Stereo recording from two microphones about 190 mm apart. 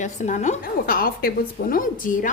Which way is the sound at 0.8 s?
50° left (ahead or behind).